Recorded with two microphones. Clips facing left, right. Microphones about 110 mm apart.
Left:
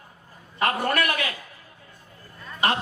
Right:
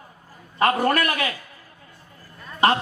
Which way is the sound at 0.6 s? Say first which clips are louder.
Right 4 dB; 35° right (ahead or behind).